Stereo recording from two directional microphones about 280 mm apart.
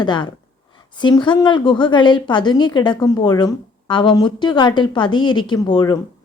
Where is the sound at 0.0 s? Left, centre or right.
Centre.